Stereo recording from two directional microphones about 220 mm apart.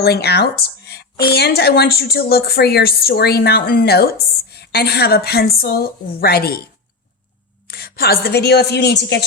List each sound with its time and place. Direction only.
0.0 s speech: 45° left (ahead or behind)
7.7 s a woman's voice: 45° left (ahead or behind)